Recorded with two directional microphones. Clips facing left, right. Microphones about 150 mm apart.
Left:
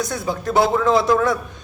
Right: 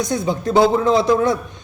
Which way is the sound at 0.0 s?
20° right (ahead or behind).